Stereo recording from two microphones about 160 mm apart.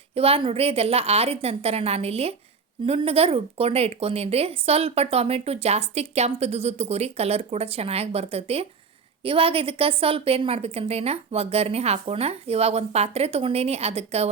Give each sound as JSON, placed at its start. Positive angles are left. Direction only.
{"t": 0.1, "sound": "speech", "side_deg": -35}